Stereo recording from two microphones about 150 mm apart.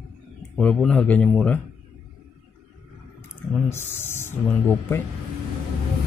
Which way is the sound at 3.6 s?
15° left (ahead or behind).